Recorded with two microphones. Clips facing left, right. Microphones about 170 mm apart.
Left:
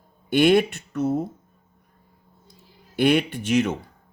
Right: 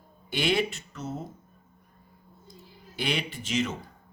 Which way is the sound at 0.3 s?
55° left (ahead or behind).